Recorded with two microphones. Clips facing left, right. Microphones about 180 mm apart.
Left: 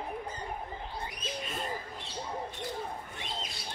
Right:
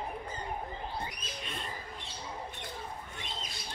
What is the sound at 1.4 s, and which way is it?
Bird, 5° left (ahead or behind).